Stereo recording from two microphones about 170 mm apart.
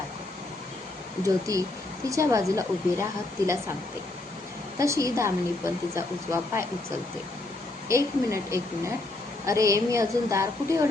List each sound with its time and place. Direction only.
1.5 s a woman's voice: 20° right (ahead or behind)
4.8 s a woman's voice: 20° right (ahead or behind)
7.9 s a woman's voice: 15° right (ahead or behind)